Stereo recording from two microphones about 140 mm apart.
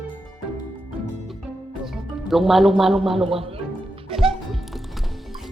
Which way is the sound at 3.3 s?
40° right (ahead or behind).